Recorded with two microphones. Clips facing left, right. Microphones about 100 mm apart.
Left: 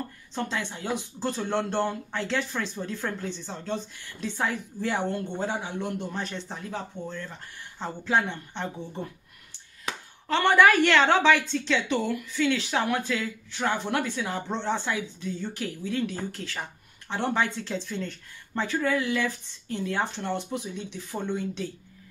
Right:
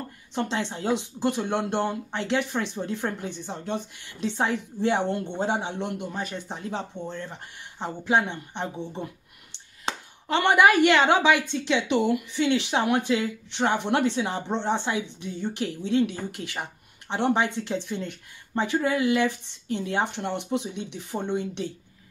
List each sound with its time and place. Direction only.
0.3 s a woman's voice: 20° right (ahead or behind)
5.9 s speech: 10° right (ahead or behind)
6.6 s a woman's voice: 25° right (ahead or behind)
9.9 s a sound: 30° right (ahead or behind)
10.2 s a woman's voice: 15° right (ahead or behind)